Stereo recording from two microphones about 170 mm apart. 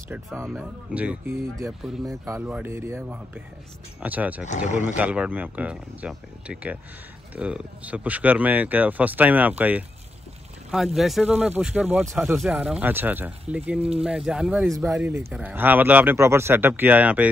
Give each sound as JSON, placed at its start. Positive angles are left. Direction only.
{"t": 0.5, "sound": "speech", "side_deg": -5}
{"t": 4.0, "sound": "speech", "side_deg": -10}